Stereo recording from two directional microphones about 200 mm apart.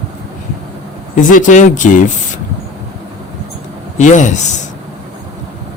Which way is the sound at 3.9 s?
40° left (ahead or behind).